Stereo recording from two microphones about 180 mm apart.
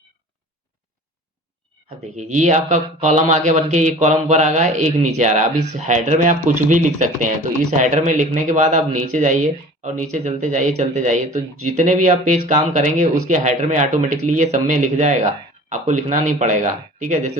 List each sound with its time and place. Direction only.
2.1 s a man's voice: 40° right (ahead or behind)